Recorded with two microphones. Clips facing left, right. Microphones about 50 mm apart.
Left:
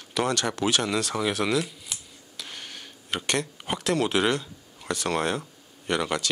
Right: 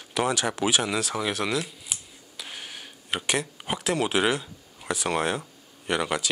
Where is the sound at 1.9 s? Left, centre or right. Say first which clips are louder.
Right 1 dB; centre.